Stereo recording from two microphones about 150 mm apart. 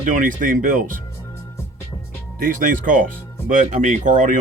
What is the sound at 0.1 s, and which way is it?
Speech, 60° right (ahead or behind).